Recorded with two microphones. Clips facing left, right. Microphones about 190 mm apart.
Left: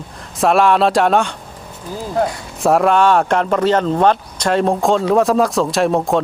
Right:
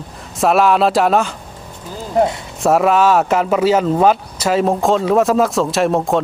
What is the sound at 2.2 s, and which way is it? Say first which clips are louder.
Speech: right 4 dB; 25° right (ahead or behind).